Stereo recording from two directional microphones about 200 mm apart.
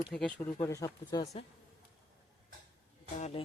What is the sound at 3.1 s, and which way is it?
Music, 35° left (ahead or behind).